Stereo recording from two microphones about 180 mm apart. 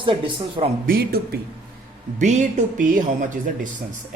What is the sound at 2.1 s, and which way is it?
Speech, 40° right (ahead or behind).